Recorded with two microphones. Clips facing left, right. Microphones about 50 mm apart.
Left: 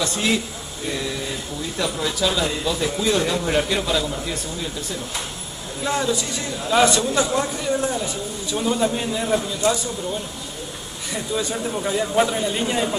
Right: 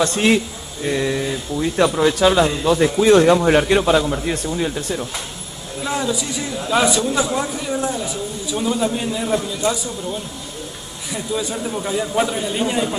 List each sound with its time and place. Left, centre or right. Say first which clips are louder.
0.0 s speech: right 6 dB; right
1.8 s speech: right 8 dB; right
5.9 s speech: even; centre
11.1 s speech: right 1 dB; centre